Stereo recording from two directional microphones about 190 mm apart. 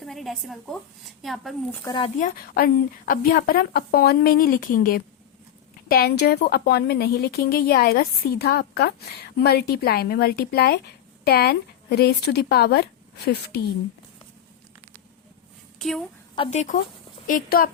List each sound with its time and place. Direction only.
0.0 s a woman's voice: centre (ahead or behind)
2.1 s a woman's voice: 45° left (ahead or behind)
15.8 s a woman's voice: centre (ahead or behind)
16.5 s a woman's voice: 40° left (ahead or behind)